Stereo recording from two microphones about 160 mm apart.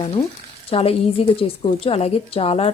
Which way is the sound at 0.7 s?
40° left (ahead or behind).